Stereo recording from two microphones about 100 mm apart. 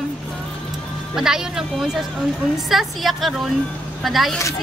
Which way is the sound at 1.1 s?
5° right (ahead or behind).